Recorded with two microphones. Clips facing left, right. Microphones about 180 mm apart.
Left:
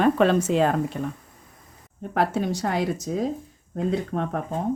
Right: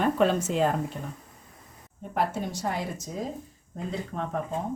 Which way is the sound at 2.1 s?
75° left (ahead or behind).